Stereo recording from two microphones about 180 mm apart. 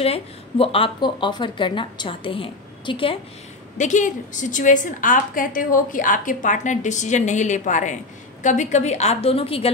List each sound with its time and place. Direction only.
0.0 s speech: 30° left (ahead or behind)
3.7 s a woman's voice: 45° left (ahead or behind)